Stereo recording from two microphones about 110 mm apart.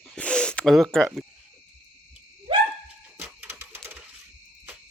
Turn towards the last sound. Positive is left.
turn(degrees=-20)  # may be behind; listen again after turning